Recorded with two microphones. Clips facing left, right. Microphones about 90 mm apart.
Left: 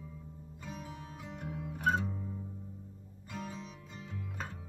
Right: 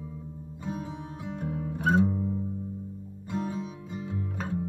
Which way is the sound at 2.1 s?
25° right (ahead or behind).